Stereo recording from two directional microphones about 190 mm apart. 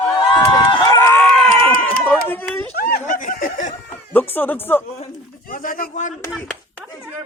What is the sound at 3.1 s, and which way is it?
Snicker, 45° left (ahead or behind).